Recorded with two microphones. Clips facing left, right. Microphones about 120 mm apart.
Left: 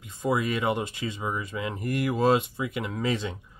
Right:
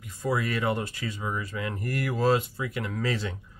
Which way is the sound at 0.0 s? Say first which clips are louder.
Left 2 dB; 20° left (ahead or behind).